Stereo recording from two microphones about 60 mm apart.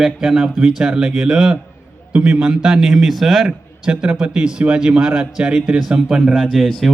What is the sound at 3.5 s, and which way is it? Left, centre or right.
A man's voice, centre.